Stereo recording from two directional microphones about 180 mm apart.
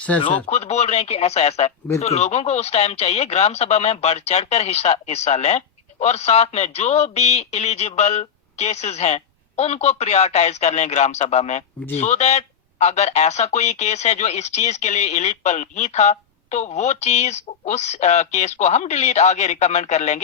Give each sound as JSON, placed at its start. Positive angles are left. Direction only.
{"t": 0.5, "sound": "speech", "side_deg": 35}